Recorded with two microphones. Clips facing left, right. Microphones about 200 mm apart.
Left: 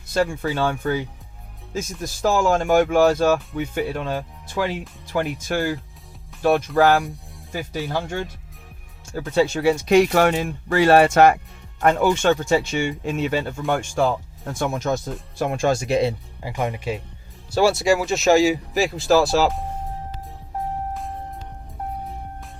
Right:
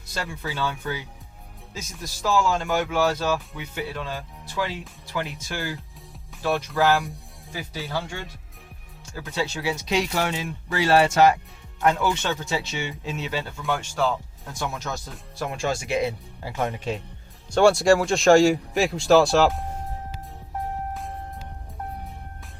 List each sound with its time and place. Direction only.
0.1 s speech: 50° left (ahead or behind)
9.3 s speech: 50° left (ahead or behind); by 16.1 s 35° left (ahead or behind)
16.4 s speech: 15° left (ahead or behind)